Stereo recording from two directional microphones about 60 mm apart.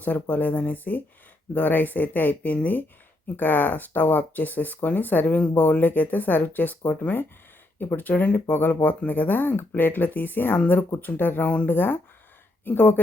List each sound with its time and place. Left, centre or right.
0.0 s speech: left